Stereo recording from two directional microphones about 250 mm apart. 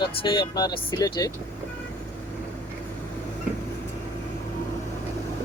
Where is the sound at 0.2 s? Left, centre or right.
Centre.